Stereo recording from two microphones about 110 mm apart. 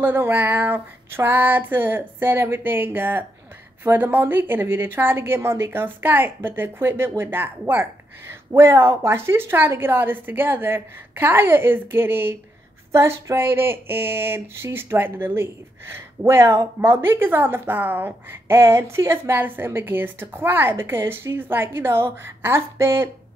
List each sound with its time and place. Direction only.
0.0 s speech: 20° right (ahead or behind)